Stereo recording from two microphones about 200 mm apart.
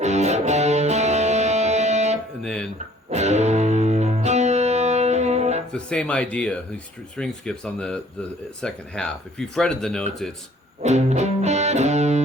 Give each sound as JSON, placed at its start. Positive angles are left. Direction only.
{"t": 0.0, "sound": "music", "side_deg": -35}
{"t": 2.4, "sound": "music", "side_deg": 5}
{"t": 2.7, "sound": "music", "side_deg": -35}
{"t": 5.7, "sound": "speech", "side_deg": 5}
{"t": 10.8, "sound": "music", "side_deg": -35}